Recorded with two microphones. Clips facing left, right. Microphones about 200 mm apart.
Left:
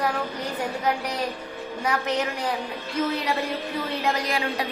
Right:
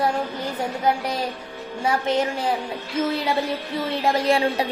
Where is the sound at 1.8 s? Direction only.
25° right (ahead or behind).